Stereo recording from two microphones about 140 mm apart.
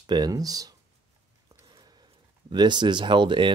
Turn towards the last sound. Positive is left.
turn(degrees=-35)  # may be behind; listen again after turning